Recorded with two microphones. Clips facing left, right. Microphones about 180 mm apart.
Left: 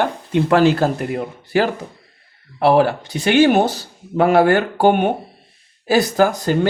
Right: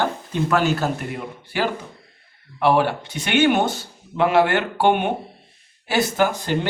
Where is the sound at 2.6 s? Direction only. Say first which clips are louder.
Left 4 dB; 35° left (ahead or behind).